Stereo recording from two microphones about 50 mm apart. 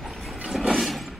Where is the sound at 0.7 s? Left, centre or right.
Centre.